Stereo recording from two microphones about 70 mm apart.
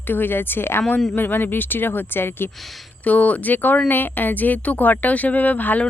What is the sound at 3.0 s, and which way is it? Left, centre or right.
Speech, left.